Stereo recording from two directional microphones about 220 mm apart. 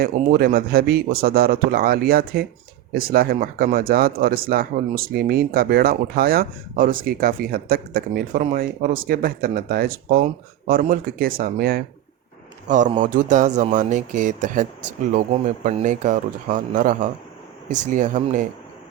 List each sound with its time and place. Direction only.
0.0 s speech: 40° right (ahead or behind)